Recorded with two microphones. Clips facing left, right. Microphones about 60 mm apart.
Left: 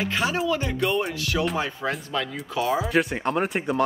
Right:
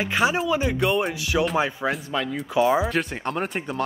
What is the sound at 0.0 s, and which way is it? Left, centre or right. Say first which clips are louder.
Speech: right 3 dB; centre.